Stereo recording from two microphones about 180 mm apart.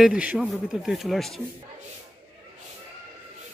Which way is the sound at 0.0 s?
5° right (ahead or behind).